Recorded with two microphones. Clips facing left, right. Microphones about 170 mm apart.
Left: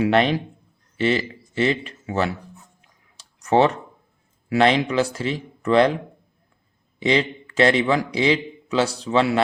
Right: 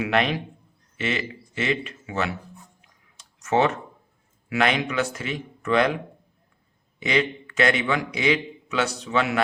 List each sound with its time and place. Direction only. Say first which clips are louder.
0.0 s a man's voice: left 5 dB; 30° left (ahead or behind)
3.2 s a sound: left 4 dB; 35° left (ahead or behind)
4.4 s a man's voice: left 5 dB; 30° left (ahead or behind)
7.0 s a man's voice: left 3 dB; 30° left (ahead or behind)